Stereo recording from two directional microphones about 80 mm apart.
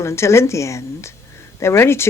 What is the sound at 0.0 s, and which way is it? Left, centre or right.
Speech, left.